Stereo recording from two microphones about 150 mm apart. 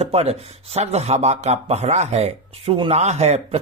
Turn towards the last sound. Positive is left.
turn(degrees=-45)  # may be behind; listen again after turning